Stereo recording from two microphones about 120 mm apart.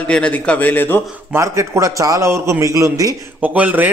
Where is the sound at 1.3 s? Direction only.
25° right (ahead or behind).